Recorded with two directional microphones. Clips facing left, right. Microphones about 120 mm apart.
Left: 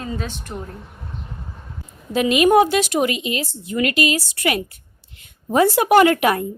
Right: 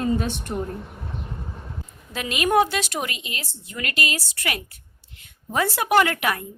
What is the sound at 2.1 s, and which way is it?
A woman's voice, 20° left (ahead or behind).